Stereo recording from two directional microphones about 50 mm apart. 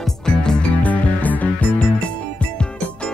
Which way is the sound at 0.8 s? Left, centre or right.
Left.